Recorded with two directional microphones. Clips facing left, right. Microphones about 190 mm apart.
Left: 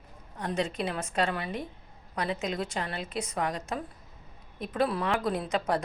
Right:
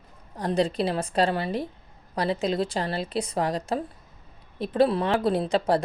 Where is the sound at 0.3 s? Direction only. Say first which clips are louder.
Right 6 dB; 35° right (ahead or behind).